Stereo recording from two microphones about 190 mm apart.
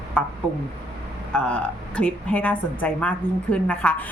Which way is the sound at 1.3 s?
5° left (ahead or behind).